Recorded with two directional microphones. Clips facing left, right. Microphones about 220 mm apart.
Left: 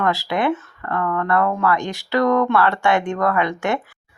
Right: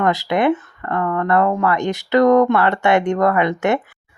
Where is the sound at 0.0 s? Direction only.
20° right (ahead or behind).